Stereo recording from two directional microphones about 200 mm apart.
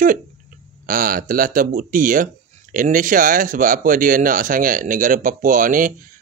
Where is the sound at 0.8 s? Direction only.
45° right (ahead or behind).